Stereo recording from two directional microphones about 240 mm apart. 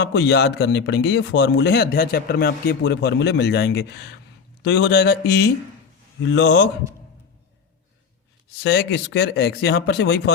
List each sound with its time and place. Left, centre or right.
0.0 s speech: left
8.5 s speech: left